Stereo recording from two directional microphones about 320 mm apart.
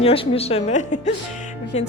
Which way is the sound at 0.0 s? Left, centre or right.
Centre.